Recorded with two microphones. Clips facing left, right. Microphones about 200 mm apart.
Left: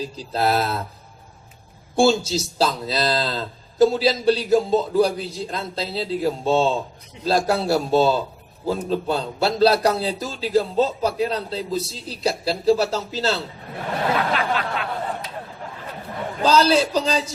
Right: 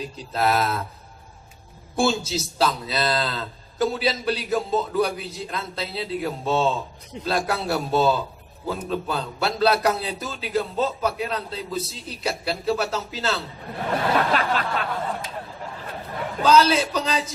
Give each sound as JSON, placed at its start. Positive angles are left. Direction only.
{"t": 0.0, "sound": "speech", "side_deg": 30}
{"t": 2.0, "sound": "speech", "side_deg": 30}
{"t": 14.3, "sound": "a sound", "side_deg": -45}
{"t": 16.4, "sound": "speech", "side_deg": 30}